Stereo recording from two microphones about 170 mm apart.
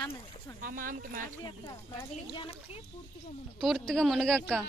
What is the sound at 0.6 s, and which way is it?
Speech, 55° right (ahead or behind).